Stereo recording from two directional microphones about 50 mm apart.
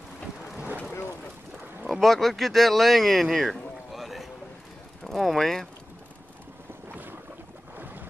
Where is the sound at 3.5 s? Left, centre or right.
Centre.